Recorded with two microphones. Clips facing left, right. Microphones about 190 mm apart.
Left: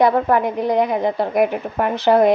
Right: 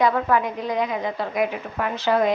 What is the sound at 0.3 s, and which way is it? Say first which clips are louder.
A woman's voice: left 6 dB; 60° left (ahead or behind).